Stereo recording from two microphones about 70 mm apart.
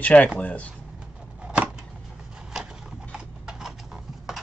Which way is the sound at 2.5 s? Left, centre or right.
Centre.